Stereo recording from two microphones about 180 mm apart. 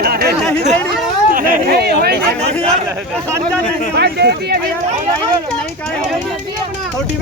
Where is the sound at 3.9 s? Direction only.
65° right (ahead or behind).